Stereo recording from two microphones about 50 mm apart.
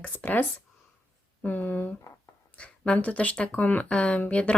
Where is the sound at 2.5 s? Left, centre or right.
Left.